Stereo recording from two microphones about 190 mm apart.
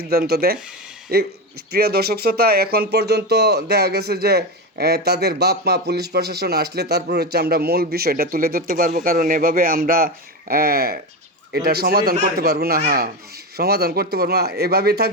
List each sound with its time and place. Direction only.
0.1 s speech: 55° right (ahead or behind)